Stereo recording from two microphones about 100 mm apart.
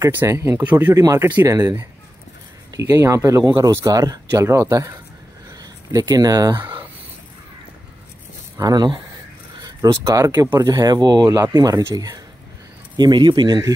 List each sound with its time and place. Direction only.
0.1 s speech: 25° right (ahead or behind)
8.5 s speech: 40° right (ahead or behind)
12.9 s speech: 45° right (ahead or behind)